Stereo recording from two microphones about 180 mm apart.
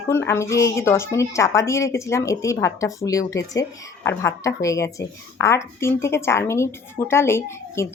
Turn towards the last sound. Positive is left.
turn(degrees=15)  # may be behind; listen again after turning